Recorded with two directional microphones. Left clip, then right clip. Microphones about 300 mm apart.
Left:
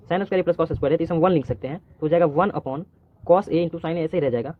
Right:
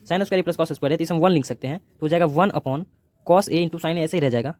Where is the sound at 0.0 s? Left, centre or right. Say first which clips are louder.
Even; right.